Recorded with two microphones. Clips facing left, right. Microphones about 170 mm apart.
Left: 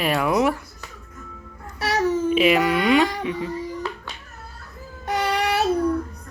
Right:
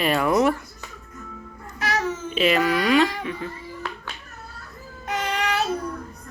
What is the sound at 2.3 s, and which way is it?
Speech, 10° left (ahead or behind).